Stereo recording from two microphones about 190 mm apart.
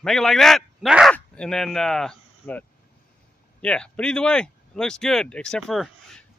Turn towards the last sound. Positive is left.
turn(degrees=0)  # may be behind; listen again after turning